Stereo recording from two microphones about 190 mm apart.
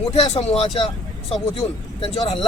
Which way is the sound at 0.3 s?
30° left (ahead or behind).